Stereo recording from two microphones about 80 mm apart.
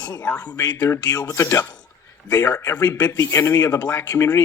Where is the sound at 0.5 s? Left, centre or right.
Left.